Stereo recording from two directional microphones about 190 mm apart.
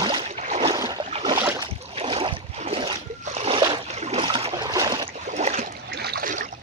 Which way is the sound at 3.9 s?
35° right (ahead or behind).